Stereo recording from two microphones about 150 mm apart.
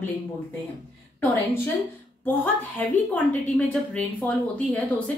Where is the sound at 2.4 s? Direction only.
10° left (ahead or behind).